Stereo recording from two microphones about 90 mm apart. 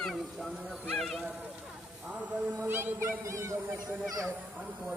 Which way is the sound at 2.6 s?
25° right (ahead or behind).